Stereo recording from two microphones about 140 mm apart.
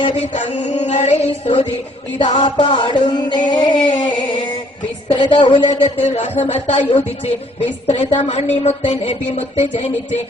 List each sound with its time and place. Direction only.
0.0 s music: 50° left (ahead or behind)
2.1 s music: 40° left (ahead or behind)
5.0 s speech: 35° left (ahead or behind); by 9.9 s 50° left (ahead or behind)